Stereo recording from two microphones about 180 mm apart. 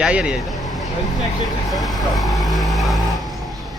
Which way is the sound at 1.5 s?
Centre (ahead or behind).